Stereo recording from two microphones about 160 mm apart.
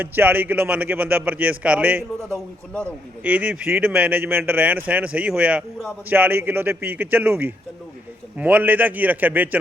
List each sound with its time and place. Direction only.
0.0 s speech: 10° right (ahead or behind)
2.1 s a man's voice: 5° left (ahead or behind)
3.2 s speech: 10° right (ahead or behind)